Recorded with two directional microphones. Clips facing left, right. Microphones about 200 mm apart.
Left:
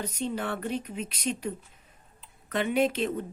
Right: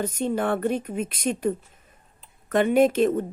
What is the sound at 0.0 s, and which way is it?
Speech, 50° right (ahead or behind).